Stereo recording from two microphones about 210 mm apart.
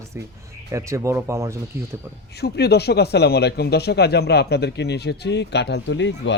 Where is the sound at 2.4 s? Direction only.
50° left (ahead or behind).